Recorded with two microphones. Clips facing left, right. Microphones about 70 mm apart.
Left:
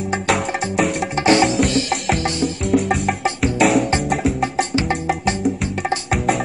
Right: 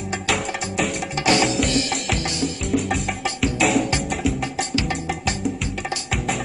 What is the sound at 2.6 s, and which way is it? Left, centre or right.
Music, centre.